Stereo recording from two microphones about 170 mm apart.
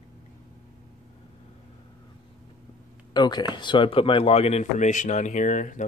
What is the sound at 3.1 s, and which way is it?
Speech, 25° left (ahead or behind).